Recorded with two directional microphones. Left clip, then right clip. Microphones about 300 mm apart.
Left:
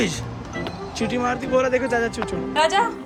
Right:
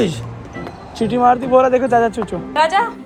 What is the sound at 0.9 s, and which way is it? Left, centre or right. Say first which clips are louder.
Speech: right 7 dB; centre.